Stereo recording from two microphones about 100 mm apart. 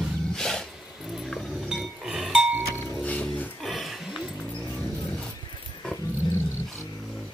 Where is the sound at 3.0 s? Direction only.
15° left (ahead or behind).